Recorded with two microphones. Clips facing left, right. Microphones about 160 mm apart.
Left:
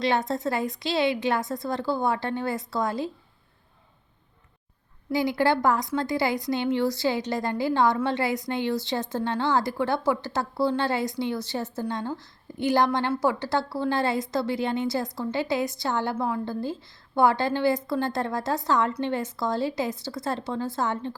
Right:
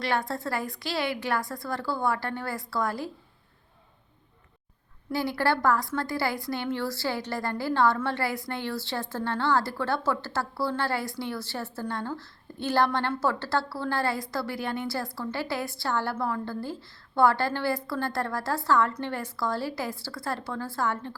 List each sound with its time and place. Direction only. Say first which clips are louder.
0.0 s a woman's voice: left 4 dB; 20° left (ahead or behind)
5.1 s a woman's voice: left 4 dB; 15° left (ahead or behind)